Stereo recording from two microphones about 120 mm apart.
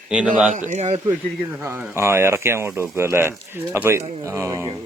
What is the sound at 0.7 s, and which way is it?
Speech, 85° right.